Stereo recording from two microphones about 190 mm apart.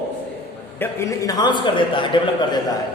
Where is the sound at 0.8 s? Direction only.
15° left (ahead or behind).